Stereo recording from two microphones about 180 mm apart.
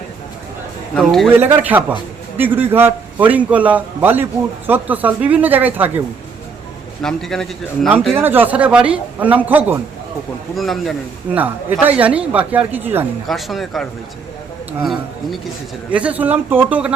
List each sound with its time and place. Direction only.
0.9 s a man's voice: centre (ahead or behind)
1.4 s a man's voice: 10° right (ahead or behind)
7.0 s a man's voice: centre (ahead or behind)
11.3 s a man's voice: 10° right (ahead or behind)
13.2 s a man's voice: centre (ahead or behind)